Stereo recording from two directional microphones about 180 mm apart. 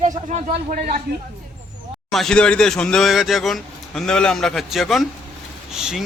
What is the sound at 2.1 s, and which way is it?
A man's voice, 5° left (ahead or behind).